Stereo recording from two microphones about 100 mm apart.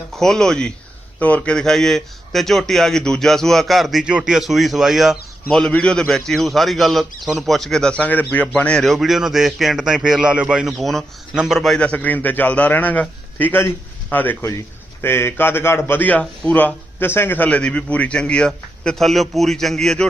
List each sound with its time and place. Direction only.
0.1 s a man's voice: 5° left (ahead or behind)
11.8 s a man's voice: 15° left (ahead or behind)